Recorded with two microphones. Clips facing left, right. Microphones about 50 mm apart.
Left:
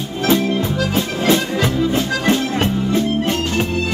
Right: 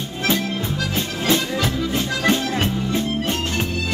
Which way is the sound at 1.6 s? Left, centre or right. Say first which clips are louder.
Left 5 dB; left.